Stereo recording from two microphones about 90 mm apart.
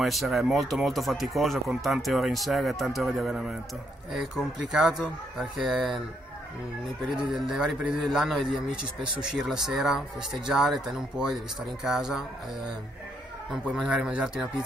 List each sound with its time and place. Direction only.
0.0 s speech: centre (ahead or behind)
7.2 s speech: 5° right (ahead or behind)
13.5 s speech: centre (ahead or behind)
13.8 s speech: 15° right (ahead or behind)